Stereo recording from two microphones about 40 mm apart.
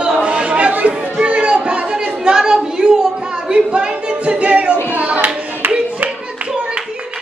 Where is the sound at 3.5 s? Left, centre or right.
Right.